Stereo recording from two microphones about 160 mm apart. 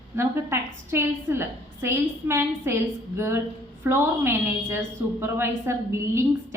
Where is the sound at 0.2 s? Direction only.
15° right (ahead or behind).